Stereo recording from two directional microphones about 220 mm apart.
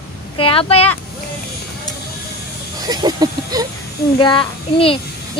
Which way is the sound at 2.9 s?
20° right (ahead or behind).